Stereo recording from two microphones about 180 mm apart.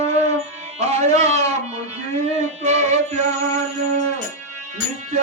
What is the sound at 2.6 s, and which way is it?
Music, 40° right (ahead or behind).